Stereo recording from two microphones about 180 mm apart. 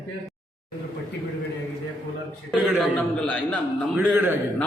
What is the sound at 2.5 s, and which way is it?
A man's voice, 5° right (ahead or behind).